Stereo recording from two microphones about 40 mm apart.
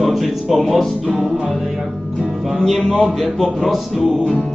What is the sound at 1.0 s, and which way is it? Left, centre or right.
Speech, centre.